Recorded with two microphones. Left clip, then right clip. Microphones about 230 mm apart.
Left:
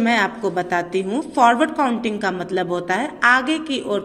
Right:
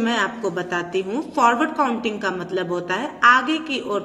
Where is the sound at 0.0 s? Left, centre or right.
Left.